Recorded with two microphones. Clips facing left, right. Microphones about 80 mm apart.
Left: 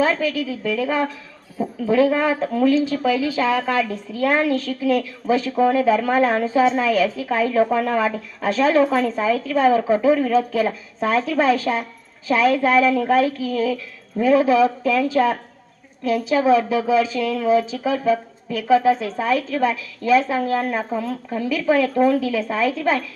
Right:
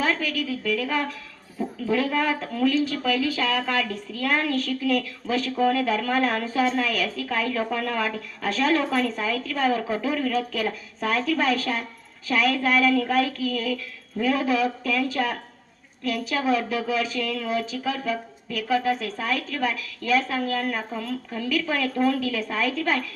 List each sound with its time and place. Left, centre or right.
0.0 s a woman's voice: left